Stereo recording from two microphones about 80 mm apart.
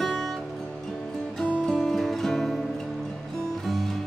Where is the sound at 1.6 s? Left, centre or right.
Centre.